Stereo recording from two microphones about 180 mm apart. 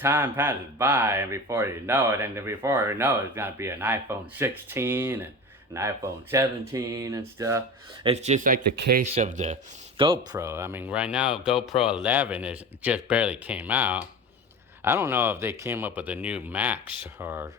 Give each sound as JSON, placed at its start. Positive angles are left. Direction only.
{"t": 0.0, "sound": "speech", "side_deg": -10}
{"t": 8.0, "sound": "speech", "side_deg": -35}
{"t": 9.1, "sound": "speech", "side_deg": -40}
{"t": 10.0, "sound": "speech", "side_deg": -25}
{"t": 10.4, "sound": "speech", "side_deg": -15}